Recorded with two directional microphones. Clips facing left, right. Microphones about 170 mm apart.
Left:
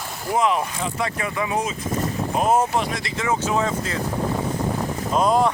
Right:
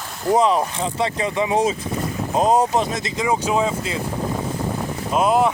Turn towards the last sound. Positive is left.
turn(degrees=-10)  # may be behind; listen again after turning